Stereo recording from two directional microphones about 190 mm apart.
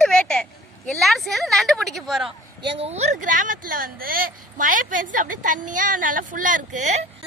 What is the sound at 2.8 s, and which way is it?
A woman's voice, 35° right (ahead or behind).